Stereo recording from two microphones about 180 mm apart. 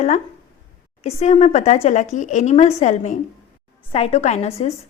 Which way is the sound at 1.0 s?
35° left (ahead or behind).